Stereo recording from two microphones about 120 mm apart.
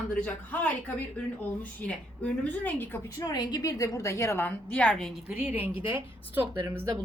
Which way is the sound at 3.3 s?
30° left (ahead or behind).